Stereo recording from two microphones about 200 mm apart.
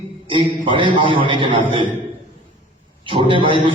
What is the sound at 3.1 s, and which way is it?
Speech, 25° right (ahead or behind).